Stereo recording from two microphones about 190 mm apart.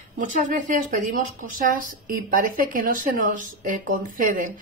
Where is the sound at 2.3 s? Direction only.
45° right (ahead or behind).